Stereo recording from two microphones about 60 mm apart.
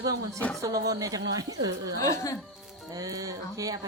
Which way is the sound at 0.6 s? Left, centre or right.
Right.